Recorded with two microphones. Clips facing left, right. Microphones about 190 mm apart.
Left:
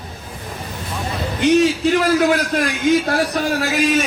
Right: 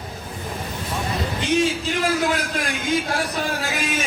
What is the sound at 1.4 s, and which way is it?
A man's voice, 55° left (ahead or behind).